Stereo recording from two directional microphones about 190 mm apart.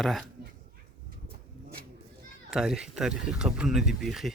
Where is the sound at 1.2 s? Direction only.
50° right (ahead or behind).